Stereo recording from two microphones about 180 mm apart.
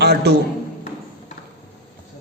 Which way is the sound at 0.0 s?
65° right (ahead or behind).